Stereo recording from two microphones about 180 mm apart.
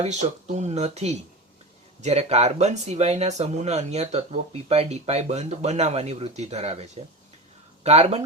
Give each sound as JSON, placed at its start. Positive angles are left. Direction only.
{"t": 0.0, "sound": "speech", "side_deg": -40}